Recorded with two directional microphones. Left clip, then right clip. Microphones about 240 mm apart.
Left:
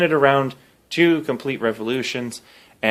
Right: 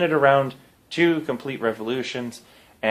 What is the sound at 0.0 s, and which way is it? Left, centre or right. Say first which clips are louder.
Speech: left 1 dB; left.